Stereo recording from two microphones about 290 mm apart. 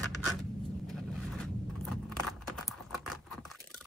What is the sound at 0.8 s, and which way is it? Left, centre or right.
Vehicle, centre.